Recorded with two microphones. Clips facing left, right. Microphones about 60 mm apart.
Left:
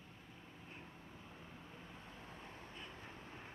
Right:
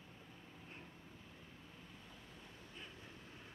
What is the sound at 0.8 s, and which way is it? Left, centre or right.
Vehicle, centre.